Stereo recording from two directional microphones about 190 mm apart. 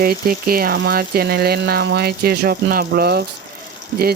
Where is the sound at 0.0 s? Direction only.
50° right (ahead or behind).